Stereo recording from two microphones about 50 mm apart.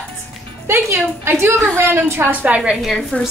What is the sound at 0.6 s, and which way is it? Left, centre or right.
A woman's voice, right.